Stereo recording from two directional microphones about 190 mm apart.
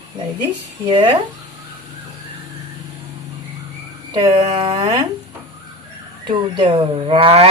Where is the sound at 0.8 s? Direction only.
25° right (ahead or behind).